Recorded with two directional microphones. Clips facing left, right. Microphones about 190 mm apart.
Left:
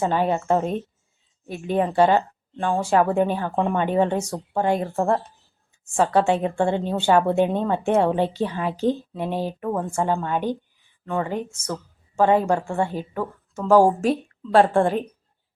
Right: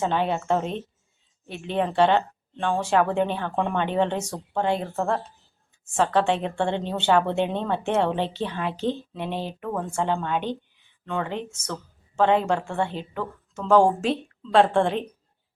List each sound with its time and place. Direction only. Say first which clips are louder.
0.0 s speech: left 3 dB; 10° left (ahead or behind)